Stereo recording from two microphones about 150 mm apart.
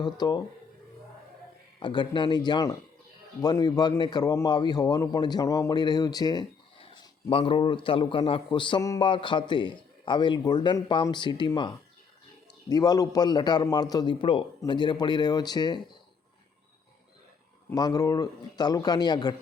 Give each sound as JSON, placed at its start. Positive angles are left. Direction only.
{"t": 0.0, "sound": "a man's voice", "side_deg": 30}
{"t": 1.8, "sound": "a man's voice", "side_deg": 30}
{"t": 6.9, "sound": "a man's voice", "side_deg": 35}
{"t": 17.7, "sound": "a man's voice", "side_deg": 25}